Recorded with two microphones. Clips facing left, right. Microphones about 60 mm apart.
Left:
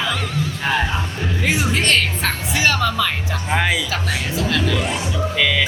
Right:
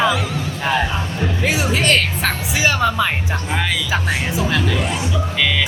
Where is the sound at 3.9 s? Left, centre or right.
Centre.